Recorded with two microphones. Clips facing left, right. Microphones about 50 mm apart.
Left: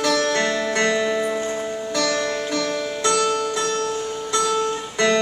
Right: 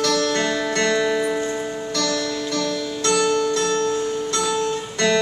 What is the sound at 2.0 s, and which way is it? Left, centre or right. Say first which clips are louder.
Music: left 1 dB; left.